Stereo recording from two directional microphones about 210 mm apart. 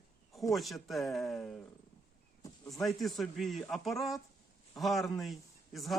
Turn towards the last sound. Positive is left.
turn(degrees=0)  # may be behind; listen again after turning